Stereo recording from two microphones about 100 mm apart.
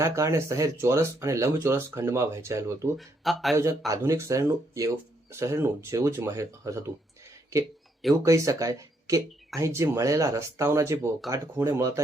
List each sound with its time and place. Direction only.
0.0 s speech: 30° right (ahead or behind)
3.0 s speech: centre (ahead or behind)
3.5 s speech: 30° right (ahead or behind)
8.2 s speech: 35° right (ahead or behind)